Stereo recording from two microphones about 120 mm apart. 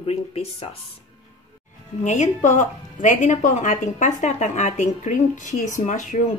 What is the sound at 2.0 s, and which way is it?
A woman's voice, 80° left.